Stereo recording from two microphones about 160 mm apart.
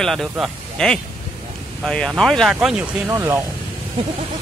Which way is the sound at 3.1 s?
20° right (ahead or behind).